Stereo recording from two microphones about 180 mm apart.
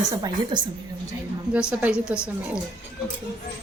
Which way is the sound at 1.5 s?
5° right (ahead or behind).